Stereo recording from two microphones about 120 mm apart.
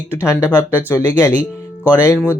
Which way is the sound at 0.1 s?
20° left (ahead or behind).